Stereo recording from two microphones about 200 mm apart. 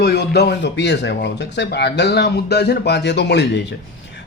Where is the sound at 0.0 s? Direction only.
55° left (ahead or behind).